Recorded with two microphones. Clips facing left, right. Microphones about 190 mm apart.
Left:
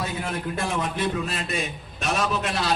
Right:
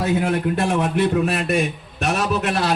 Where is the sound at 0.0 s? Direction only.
65° right (ahead or behind).